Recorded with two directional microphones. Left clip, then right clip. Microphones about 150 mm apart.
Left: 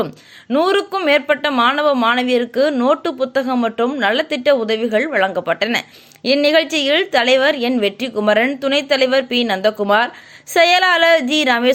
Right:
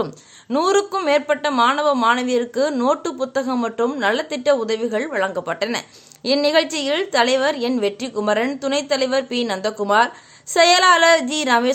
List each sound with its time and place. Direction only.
0.5 s speech: 10° left (ahead or behind)